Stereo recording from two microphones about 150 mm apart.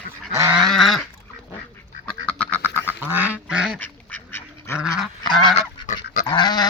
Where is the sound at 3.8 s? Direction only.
15° left (ahead or behind).